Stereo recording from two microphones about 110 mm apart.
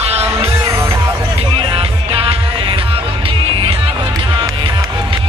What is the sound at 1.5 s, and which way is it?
Music, 60° right (ahead or behind).